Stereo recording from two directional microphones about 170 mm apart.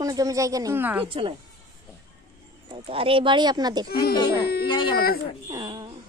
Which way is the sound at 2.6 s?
35° right (ahead or behind).